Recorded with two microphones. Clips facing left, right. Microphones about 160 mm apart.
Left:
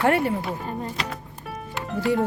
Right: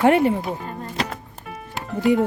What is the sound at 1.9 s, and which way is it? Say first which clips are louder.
Speech: right 4 dB; 20° right (ahead or behind).